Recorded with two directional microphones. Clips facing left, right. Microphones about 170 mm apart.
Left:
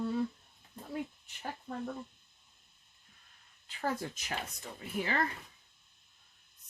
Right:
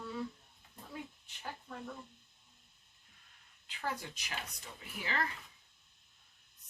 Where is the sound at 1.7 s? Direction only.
50° left (ahead or behind).